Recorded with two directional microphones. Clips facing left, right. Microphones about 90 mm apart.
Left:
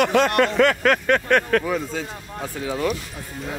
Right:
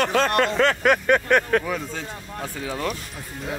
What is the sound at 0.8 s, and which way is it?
Speech, 10° right (ahead or behind).